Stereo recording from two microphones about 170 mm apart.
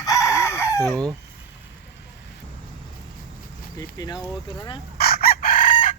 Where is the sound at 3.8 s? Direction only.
25° left (ahead or behind).